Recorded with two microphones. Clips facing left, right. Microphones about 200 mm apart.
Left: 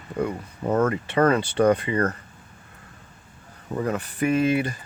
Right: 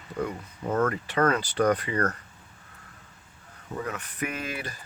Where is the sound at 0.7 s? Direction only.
25° left (ahead or behind).